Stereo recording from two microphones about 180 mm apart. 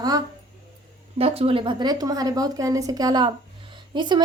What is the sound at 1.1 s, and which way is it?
A woman's voice, 35° right (ahead or behind).